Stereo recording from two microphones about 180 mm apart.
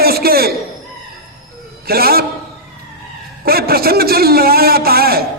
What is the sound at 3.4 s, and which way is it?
Speech, 60° right (ahead or behind).